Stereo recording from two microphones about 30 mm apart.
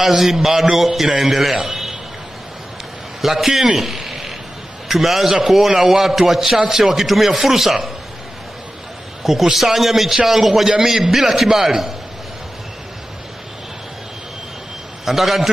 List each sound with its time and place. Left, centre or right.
0.0 s a man's voice: centre
3.2 s a man's voice: centre
3.7 s a sound: centre
4.8 s a man's voice: centre
9.2 s a man's voice: centre
15.0 s a man's voice: centre